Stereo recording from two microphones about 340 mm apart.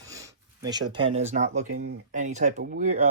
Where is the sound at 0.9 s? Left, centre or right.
Centre.